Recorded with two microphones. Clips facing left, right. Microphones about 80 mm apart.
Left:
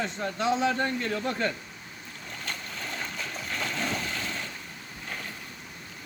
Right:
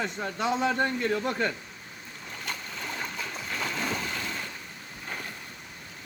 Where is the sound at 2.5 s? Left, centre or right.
Centre.